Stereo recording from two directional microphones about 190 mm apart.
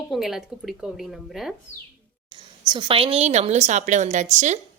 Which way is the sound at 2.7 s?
25° right (ahead or behind).